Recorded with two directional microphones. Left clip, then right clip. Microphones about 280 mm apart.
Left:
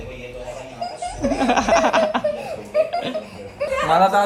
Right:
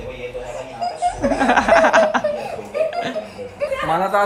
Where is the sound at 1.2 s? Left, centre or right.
Centre.